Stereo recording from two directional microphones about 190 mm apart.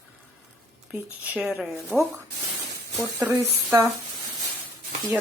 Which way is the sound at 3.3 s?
15° right (ahead or behind).